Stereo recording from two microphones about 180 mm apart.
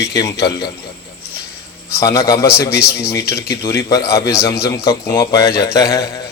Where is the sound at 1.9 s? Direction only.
15° left (ahead or behind).